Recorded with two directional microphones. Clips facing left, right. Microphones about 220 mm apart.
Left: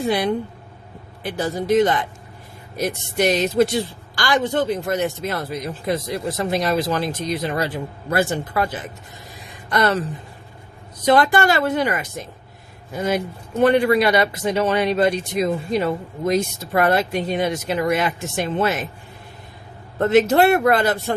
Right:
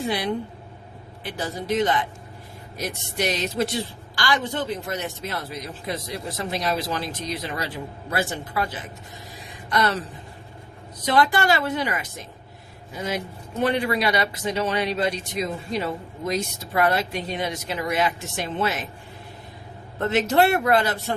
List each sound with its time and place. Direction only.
1.2 s speech: 45° left (ahead or behind)
11.0 s speech: 50° left (ahead or behind)
20.0 s speech: 45° left (ahead or behind)